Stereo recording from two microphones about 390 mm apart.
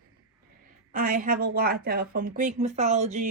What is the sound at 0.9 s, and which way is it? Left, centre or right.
A woman's voice, right.